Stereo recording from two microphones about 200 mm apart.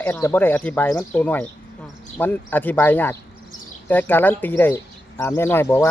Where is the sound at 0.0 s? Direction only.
10° left (ahead or behind).